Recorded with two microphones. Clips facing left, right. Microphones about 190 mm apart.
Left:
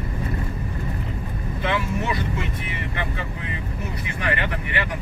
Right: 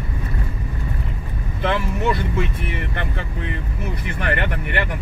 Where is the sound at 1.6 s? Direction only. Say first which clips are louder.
Right 4 dB; 55° right (ahead or behind).